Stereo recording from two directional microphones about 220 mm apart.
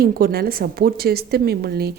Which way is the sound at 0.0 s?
45° right (ahead or behind).